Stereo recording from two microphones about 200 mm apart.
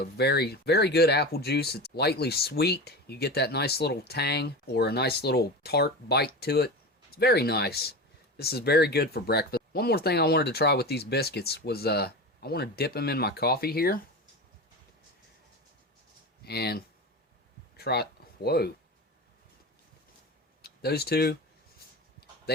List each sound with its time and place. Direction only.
0.0 s speech: 55° left (ahead or behind)
16.4 s speech: 55° left (ahead or behind)
20.6 s speech: 50° left (ahead or behind)
22.5 s speech: 55° left (ahead or behind)